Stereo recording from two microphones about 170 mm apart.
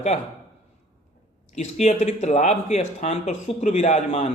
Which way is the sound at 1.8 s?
40° left (ahead or behind).